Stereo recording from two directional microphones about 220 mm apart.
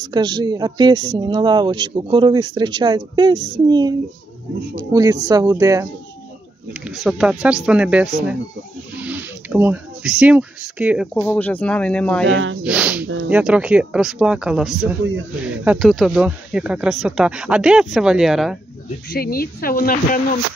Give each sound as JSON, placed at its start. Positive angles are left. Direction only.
{"t": 0.0, "sound": "speech", "side_deg": -20}
{"t": 6.7, "sound": "speech", "side_deg": 0}
{"t": 11.2, "sound": "speech", "side_deg": 10}
{"t": 12.3, "sound": "speech", "side_deg": -60}
{"t": 12.6, "sound": "speech", "side_deg": -5}
{"t": 13.0, "sound": "speech", "side_deg": -60}
{"t": 13.3, "sound": "speech", "side_deg": -5}
{"t": 19.1, "sound": "speech", "side_deg": 40}